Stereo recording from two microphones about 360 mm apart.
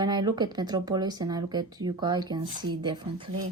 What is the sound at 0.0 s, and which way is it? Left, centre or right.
Speech, centre.